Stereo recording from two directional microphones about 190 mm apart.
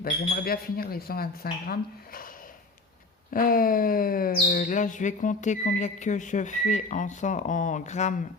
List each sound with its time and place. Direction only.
0.0 s speech: 50° left (ahead or behind)
3.3 s speech: 50° left (ahead or behind)